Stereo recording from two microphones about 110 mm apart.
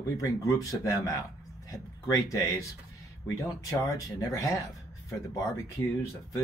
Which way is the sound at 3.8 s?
25° left (ahead or behind).